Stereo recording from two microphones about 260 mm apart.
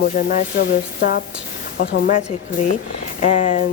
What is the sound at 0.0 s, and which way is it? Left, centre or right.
Speech, left.